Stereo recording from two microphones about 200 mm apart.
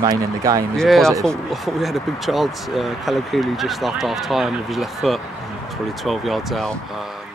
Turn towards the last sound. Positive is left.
turn(degrees=0)  # may be behind; listen again after turning